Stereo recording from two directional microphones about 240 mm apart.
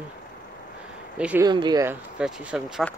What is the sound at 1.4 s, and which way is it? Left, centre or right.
Speech, centre.